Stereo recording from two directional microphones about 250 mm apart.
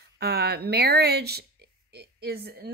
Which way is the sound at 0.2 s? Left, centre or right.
Right.